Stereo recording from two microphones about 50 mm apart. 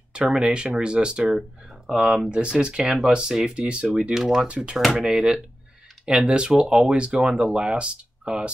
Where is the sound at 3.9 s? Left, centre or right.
Centre.